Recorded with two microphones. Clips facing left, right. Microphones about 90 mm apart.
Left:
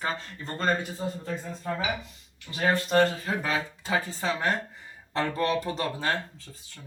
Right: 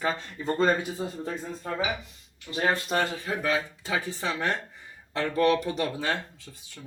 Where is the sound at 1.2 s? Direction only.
25° right (ahead or behind).